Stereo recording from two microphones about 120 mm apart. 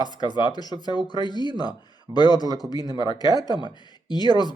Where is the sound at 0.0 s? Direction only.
35° left (ahead or behind).